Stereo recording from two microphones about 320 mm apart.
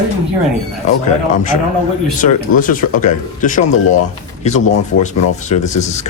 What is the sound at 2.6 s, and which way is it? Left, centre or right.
Speech, left.